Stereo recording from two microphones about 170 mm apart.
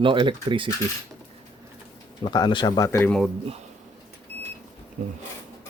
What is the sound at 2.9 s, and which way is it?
Speech, 10° left (ahead or behind).